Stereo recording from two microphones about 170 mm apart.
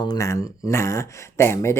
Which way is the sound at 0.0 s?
20° left (ahead or behind).